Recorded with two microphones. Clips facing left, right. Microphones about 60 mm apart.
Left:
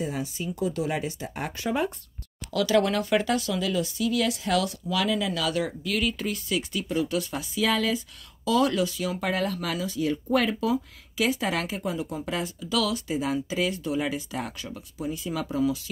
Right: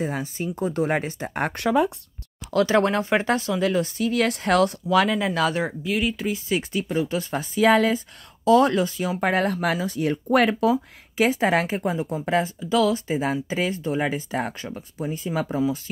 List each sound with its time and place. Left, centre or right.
0.0 s speech: right
2.5 s speech: right; by 6.4 s centre
6.5 s speech: right
10.7 s speech: right